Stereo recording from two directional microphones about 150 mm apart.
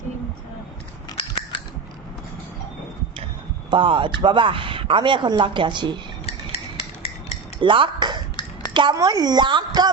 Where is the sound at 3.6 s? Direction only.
35° right (ahead or behind).